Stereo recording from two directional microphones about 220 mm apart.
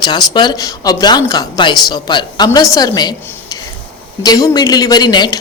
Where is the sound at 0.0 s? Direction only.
20° left (ahead or behind).